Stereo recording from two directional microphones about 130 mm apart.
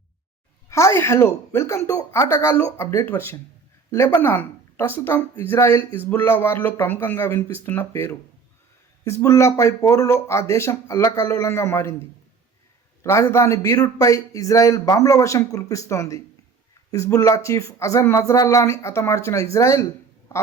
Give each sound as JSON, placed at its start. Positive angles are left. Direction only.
{"t": 0.7, "sound": "a woman's voice", "side_deg": 20}